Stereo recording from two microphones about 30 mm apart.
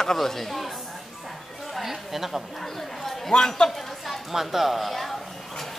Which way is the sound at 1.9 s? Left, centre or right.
Centre.